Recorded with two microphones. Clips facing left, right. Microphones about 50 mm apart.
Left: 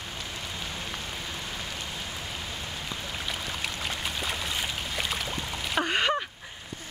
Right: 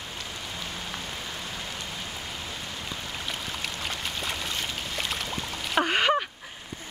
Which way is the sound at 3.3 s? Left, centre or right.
Centre.